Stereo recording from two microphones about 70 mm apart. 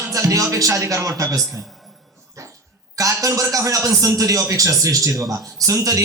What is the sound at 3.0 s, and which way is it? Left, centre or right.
A man's voice, right.